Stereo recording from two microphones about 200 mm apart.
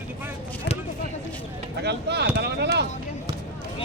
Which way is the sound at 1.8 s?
55° right (ahead or behind).